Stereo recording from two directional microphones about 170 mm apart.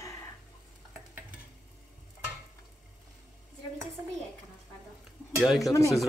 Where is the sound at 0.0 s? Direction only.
15° left (ahead or behind).